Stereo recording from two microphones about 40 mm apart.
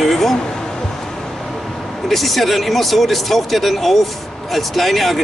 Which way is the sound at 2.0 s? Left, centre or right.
Centre.